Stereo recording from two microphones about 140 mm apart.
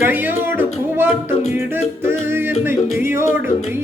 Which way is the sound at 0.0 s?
15° right (ahead or behind).